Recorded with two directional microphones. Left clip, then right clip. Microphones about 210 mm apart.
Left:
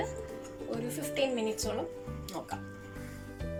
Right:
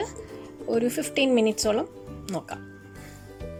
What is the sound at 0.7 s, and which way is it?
Speech, 55° right (ahead or behind).